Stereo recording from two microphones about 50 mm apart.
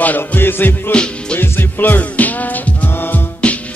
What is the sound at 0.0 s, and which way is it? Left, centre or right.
Music, left.